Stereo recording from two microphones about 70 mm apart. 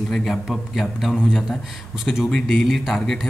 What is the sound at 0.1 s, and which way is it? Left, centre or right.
A man's voice, centre.